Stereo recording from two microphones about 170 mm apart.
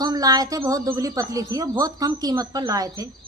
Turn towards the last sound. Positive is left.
turn(degrees=-20)  # may be behind; listen again after turning